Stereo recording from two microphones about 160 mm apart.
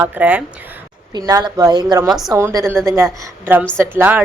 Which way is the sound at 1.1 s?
25° right (ahead or behind).